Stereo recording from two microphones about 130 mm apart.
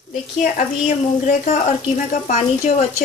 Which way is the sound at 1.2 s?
65° left (ahead or behind).